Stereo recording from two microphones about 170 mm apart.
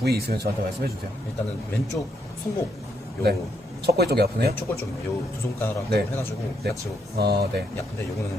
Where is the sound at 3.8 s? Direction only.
70° right (ahead or behind).